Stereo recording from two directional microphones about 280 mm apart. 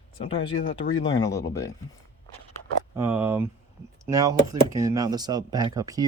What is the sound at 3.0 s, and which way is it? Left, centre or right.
Speech, centre.